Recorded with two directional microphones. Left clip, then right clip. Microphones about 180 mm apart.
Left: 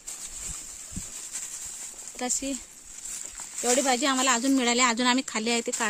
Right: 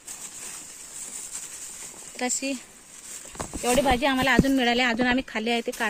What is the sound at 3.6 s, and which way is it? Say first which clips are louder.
Speech: right 2 dB; 90° left.